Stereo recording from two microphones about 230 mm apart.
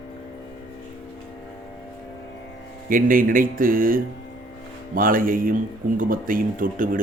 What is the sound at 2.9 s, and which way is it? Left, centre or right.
Speech, right.